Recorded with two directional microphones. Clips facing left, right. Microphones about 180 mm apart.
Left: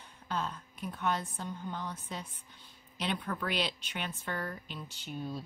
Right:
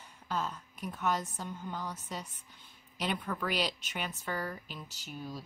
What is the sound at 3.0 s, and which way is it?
A woman's voice, 5° right (ahead or behind).